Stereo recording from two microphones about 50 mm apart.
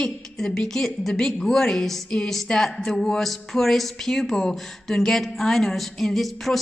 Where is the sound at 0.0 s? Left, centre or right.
Centre.